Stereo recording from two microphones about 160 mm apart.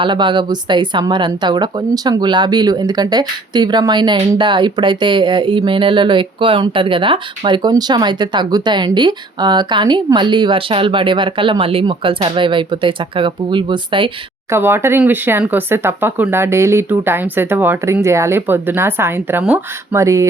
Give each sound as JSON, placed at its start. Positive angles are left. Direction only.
{"t": 0.0, "sound": "a woman's voice", "side_deg": -30}
{"t": 14.5, "sound": "speech", "side_deg": -15}